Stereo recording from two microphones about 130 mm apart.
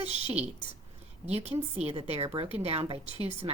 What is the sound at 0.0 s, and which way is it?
A woman's voice, 55° right (ahead or behind).